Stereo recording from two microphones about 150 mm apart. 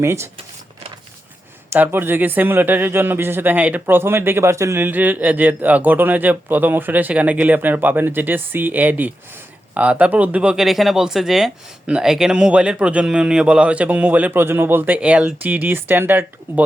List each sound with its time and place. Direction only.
0.0 s a man's voice: 15° right (ahead or behind)
1.7 s a man's voice: 15° right (ahead or behind)